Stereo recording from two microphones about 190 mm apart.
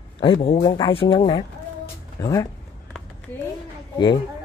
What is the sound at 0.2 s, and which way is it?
Speech, 30° left (ahead or behind).